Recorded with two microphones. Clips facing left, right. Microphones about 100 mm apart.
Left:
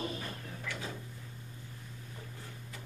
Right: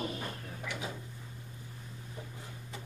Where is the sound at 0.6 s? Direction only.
15° right (ahead or behind).